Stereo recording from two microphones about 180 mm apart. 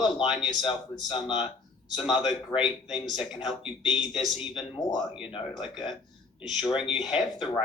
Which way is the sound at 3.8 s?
25° left (ahead or behind).